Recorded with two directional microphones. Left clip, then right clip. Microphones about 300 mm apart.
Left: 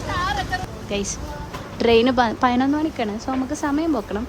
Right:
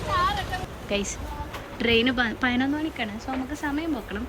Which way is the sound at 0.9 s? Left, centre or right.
Centre.